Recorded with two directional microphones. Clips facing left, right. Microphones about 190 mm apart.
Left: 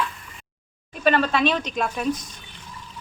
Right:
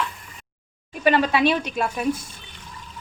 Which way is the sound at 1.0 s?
15° right (ahead or behind).